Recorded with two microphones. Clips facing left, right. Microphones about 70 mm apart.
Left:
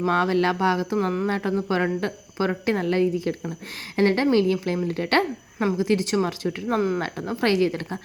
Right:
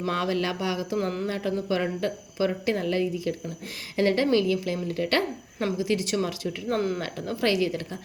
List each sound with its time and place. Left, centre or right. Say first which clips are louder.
0.1 s speech: left 5 dB; left
6.7 s speech: left 4 dB; centre
7.0 s speech: left 2 dB; left